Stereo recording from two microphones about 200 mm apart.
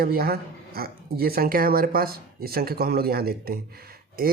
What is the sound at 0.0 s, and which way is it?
Speech, 50° right (ahead or behind).